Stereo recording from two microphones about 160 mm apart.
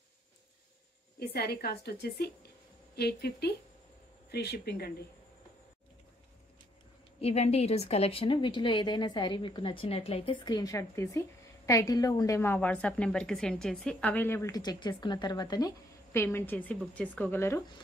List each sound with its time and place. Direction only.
1.2 s a woman's voice: 75° left (ahead or behind)
7.2 s a woman's voice: 40° left (ahead or behind); by 17.6 s 15° left (ahead or behind)